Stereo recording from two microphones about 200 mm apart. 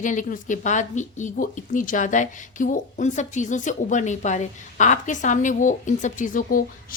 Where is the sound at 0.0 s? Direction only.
40° left (ahead or behind).